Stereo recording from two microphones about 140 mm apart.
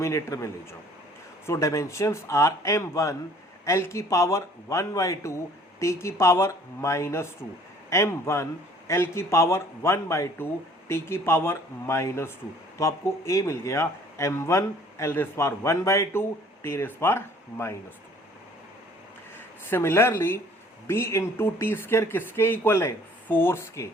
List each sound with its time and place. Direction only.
0.0 s speech: 20° left (ahead or behind)
19.6 s speech: 15° left (ahead or behind)